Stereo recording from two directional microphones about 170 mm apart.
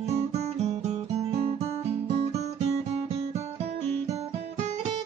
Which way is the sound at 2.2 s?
40° right (ahead or behind).